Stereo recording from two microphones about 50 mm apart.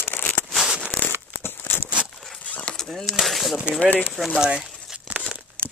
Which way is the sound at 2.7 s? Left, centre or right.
Centre.